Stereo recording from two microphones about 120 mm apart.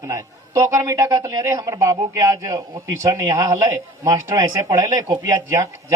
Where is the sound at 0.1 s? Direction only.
30° right (ahead or behind).